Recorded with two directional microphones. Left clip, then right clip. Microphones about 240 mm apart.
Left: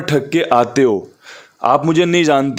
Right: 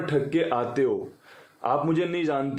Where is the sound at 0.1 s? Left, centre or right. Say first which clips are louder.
Left 11 dB; left.